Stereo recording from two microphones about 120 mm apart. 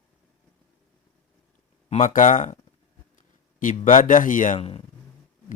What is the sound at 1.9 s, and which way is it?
A man's voice, 80° left.